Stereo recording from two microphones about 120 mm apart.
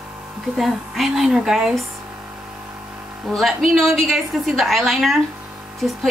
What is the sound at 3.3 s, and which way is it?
A woman's voice, centre (ahead or behind).